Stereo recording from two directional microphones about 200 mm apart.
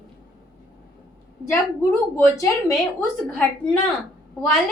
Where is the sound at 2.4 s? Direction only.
15° left (ahead or behind).